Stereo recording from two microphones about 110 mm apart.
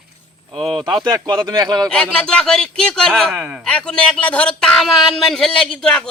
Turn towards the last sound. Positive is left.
turn(degrees=5)  # may be behind; listen again after turning